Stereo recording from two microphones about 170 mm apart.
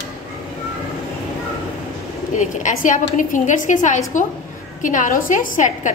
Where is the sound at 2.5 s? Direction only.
50° left (ahead or behind).